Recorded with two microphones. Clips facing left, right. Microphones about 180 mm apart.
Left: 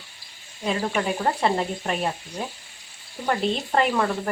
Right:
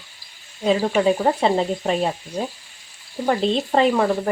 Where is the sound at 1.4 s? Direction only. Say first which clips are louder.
Right 4 dB; 25° right (ahead or behind).